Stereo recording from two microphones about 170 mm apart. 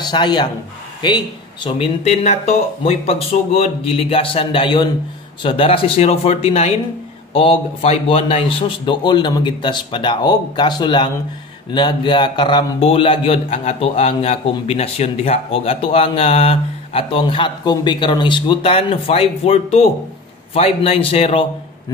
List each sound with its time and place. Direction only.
0.0 s a man's voice: 25° left (ahead or behind)